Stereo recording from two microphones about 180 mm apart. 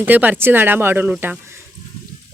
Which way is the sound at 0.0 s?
10° right (ahead or behind).